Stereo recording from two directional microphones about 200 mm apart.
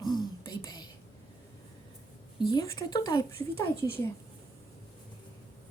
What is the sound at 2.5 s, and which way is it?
Speech, 20° left (ahead or behind).